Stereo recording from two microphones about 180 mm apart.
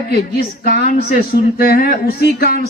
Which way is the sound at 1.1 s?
60° left (ahead or behind).